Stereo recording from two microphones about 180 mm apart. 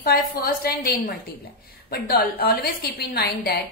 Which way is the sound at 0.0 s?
55° left (ahead or behind).